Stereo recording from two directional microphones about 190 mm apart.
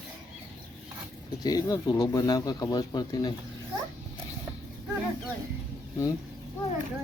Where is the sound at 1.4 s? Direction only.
20° left (ahead or behind).